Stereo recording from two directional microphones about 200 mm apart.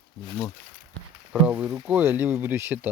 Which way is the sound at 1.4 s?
10° right (ahead or behind).